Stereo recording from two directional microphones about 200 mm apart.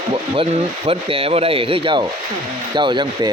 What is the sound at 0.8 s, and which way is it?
Speech, 30° right (ahead or behind).